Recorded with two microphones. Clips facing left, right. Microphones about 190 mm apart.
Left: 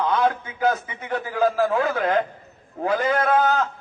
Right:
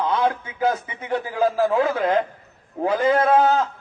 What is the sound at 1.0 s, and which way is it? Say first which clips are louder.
A man's voice: right 1 dB; 25° right (ahead or behind).